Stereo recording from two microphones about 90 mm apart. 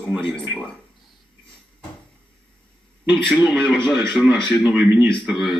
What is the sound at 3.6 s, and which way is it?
Speech, 5° left (ahead or behind).